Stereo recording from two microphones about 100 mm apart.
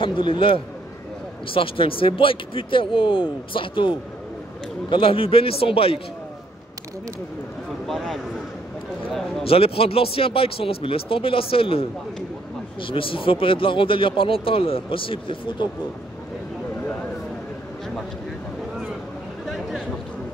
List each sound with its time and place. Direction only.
0.0 s speech: 60° left (ahead or behind)
7.9 s speech: 5° left (ahead or behind)
9.4 s speech: 75° left (ahead or behind)
12.8 s speech: 60° left (ahead or behind)